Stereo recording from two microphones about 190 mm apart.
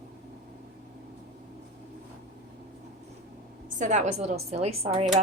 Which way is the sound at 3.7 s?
40° right (ahead or behind).